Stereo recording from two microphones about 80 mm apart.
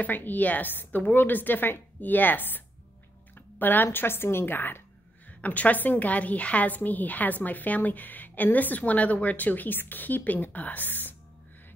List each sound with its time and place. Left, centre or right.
0.0 s a woman's voice: left